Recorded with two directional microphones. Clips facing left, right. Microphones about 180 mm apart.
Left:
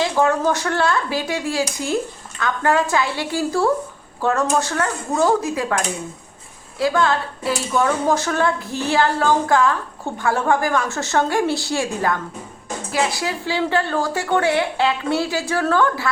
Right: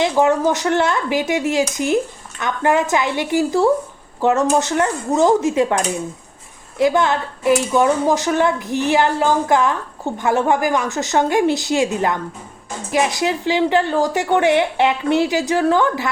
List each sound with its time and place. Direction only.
0.0 s a woman's voice: 15° right (ahead or behind)